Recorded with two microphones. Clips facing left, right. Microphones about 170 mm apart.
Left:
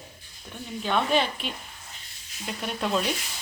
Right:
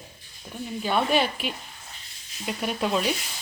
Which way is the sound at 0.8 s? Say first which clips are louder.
Right 1 dB; 5° right (ahead or behind).